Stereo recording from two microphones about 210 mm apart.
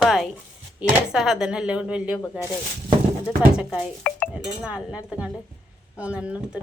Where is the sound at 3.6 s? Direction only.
Centre (ahead or behind).